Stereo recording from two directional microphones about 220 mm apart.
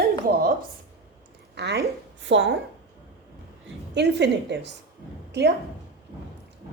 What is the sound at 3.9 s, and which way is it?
Speech, 50° right (ahead or behind).